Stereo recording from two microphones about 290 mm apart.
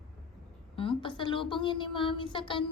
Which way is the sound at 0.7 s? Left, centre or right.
Centre.